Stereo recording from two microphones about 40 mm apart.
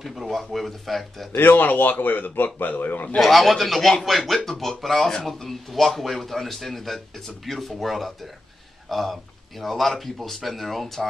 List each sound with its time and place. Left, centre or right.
0.0 s a man's voice: centre
1.3 s speech: left
3.2 s a man's voice: centre